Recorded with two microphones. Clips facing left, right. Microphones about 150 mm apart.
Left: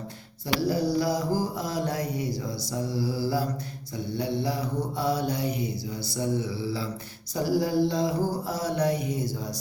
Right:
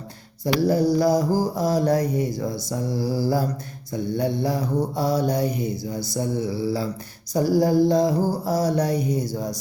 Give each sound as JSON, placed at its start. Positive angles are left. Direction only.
{"t": 0.4, "sound": "mantra", "side_deg": -45}